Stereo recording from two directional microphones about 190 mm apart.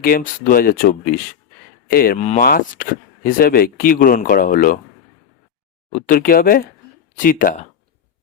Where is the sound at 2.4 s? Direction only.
50° left (ahead or behind).